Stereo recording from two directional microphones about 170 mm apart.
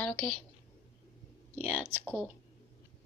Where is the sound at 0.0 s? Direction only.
10° left (ahead or behind).